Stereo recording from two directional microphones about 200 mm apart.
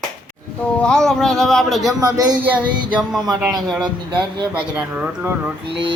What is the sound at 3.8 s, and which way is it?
Speech, 20° right (ahead or behind).